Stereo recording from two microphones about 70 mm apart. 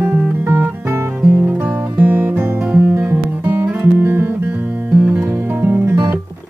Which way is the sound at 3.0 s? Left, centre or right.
Right.